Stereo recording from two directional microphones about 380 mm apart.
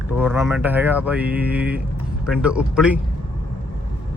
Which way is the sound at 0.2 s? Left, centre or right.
Centre.